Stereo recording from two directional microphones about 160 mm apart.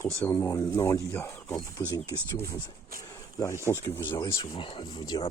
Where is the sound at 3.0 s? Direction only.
15° left (ahead or behind).